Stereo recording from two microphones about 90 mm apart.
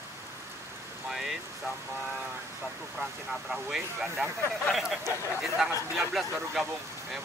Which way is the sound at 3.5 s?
5° right (ahead or behind).